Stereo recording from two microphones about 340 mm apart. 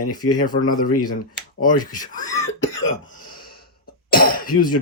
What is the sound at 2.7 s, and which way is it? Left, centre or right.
Cough, left.